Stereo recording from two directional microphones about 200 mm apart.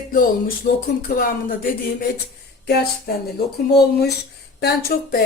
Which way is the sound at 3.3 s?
50° left (ahead or behind).